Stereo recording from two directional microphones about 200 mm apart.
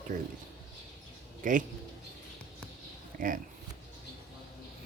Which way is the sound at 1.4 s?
40° right (ahead or behind).